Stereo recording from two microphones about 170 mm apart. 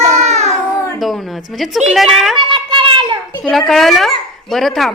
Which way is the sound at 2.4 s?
30° right (ahead or behind).